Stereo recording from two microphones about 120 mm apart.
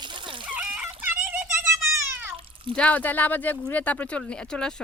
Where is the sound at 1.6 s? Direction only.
20° right (ahead or behind).